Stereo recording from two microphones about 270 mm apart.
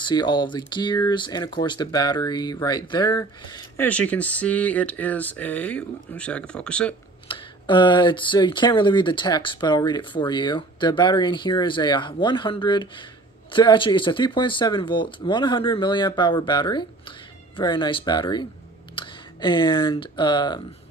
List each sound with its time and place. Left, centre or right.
0.0 s speech: centre
7.2 s speech: centre